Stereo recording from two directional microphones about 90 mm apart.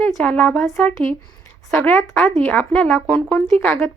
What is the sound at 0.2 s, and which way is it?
A woman's voice, 15° left (ahead or behind).